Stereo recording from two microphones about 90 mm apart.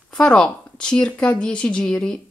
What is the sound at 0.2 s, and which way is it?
Speech, 10° left (ahead or behind).